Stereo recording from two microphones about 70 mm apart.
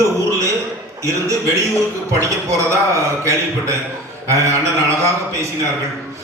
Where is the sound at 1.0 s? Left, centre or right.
Right.